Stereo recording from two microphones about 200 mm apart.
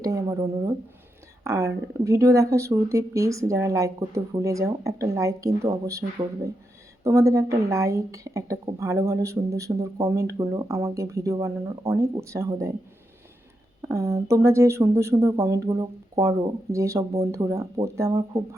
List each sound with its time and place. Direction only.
0.0 s a woman's voice: 15° right (ahead or behind)
13.8 s a woman's voice: 15° right (ahead or behind)